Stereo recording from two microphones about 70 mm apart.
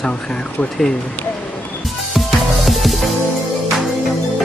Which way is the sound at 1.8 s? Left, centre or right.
Centre.